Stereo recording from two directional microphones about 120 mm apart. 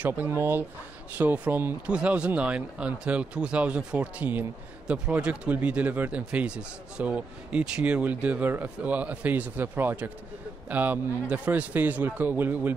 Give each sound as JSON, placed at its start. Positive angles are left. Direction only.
{"t": 0.0, "sound": "speech", "side_deg": -15}